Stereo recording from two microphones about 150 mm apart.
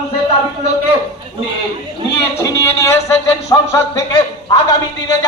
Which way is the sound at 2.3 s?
20° left (ahead or behind).